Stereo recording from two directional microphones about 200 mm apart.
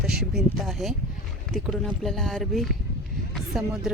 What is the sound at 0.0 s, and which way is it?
Speech, centre (ahead or behind).